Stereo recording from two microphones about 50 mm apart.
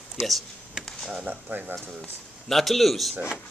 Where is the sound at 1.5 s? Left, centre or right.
Right.